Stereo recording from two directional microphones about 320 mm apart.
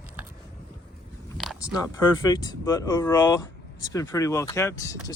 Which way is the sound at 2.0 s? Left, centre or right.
Centre.